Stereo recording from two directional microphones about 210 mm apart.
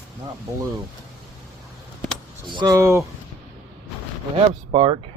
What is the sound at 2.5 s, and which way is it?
Speech, 20° right (ahead or behind).